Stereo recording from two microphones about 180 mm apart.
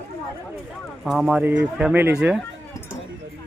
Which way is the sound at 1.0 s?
Centre (ahead or behind).